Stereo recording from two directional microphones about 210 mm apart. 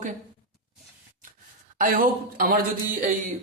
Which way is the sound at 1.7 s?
40° right (ahead or behind).